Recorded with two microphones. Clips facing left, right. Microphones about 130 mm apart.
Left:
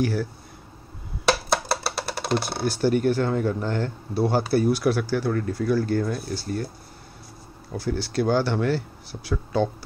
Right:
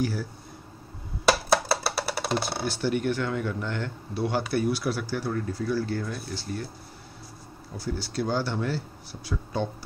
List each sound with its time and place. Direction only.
0.0 s speech: 65° left (ahead or behind)
1.5 s a sound: 5° right (ahead or behind)
2.6 s speech: 45° left (ahead or behind)
7.7 s speech: 65° left (ahead or behind)